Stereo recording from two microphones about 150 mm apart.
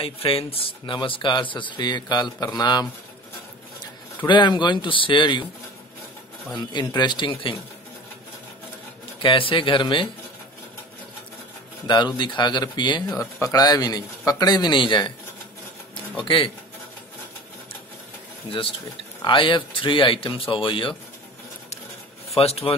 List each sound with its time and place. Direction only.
0.0 s a man's voice: 40° left (ahead or behind)
4.3 s speech: 30° left (ahead or behind)
6.6 s speech: 25° left (ahead or behind)
9.2 s speech: 35° left (ahead or behind)
12.2 s a man's voice: 30° left (ahead or behind)
16.2 s speech: 35° left (ahead or behind)
18.5 s speech: 35° left (ahead or behind)
22.3 s speech: 40° left (ahead or behind)